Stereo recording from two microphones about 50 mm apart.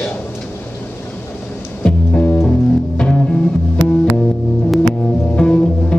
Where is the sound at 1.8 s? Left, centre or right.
Left.